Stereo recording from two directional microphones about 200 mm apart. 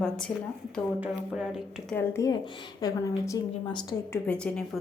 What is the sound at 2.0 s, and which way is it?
A woman's voice, 15° left (ahead or behind).